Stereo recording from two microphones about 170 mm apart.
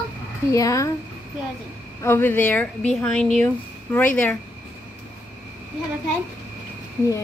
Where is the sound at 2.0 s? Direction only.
15° left (ahead or behind).